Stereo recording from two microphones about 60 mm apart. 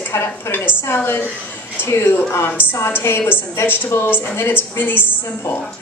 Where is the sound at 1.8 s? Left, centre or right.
Left.